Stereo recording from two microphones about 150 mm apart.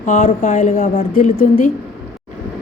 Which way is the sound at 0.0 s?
55° left (ahead or behind).